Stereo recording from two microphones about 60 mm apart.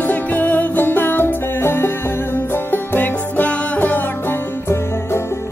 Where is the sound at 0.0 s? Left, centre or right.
Left.